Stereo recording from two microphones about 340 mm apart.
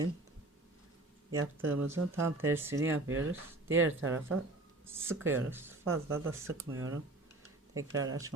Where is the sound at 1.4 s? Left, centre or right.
Right.